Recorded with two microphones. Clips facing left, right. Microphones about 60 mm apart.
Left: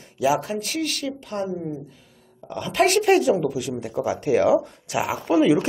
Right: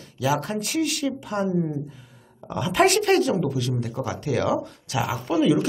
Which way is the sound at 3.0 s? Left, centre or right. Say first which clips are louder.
Left 2 dB; centre.